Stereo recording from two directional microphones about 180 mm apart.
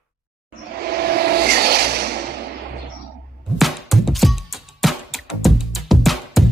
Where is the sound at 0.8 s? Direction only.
60° right (ahead or behind).